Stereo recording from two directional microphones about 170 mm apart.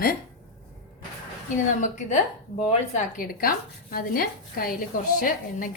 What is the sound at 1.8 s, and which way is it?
A woman's voice, 45° left (ahead or behind).